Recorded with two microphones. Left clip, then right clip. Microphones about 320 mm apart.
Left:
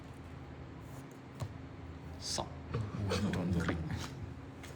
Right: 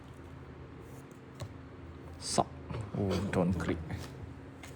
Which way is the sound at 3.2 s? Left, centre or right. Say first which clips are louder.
Right 5 dB; centre.